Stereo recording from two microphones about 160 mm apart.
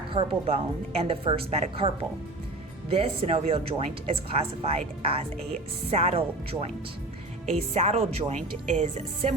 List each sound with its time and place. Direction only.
0.1 s a woman's voice: 35° right (ahead or behind)